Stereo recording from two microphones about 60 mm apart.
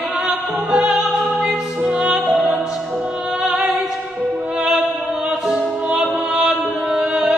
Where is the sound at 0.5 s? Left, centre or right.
Right.